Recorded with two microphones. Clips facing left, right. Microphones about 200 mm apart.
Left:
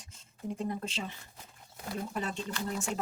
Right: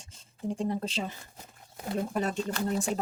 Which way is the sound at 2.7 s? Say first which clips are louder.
Right 5 dB; 35° right (ahead or behind).